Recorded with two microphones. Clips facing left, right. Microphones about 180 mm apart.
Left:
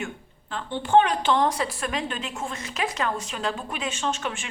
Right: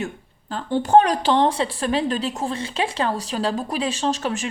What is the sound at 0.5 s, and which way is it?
A woman's voice, 40° right (ahead or behind).